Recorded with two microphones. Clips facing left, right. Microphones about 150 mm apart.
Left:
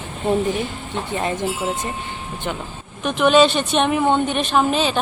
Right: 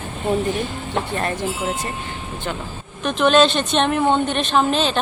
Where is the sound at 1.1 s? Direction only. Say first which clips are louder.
Left 1 dB; 15° left (ahead or behind).